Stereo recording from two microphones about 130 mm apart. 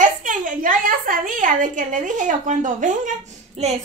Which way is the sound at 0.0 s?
80° right.